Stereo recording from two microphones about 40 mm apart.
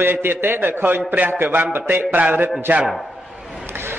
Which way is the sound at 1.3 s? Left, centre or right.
Right.